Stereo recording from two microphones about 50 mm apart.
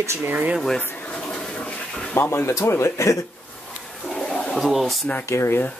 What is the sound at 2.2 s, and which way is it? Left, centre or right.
Speech, left.